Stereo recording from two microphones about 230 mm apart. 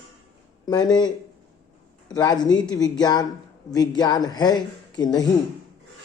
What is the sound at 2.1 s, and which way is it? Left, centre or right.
A woman's voice, centre.